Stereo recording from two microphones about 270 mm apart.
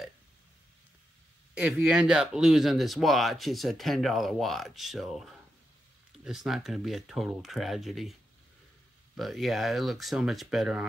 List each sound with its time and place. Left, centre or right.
1.6 s speech: centre